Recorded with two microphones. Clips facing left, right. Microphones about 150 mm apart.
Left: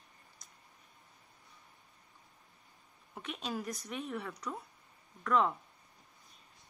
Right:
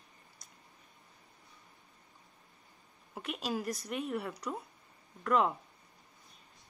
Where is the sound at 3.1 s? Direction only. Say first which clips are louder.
Right 3 dB; 5° right (ahead or behind).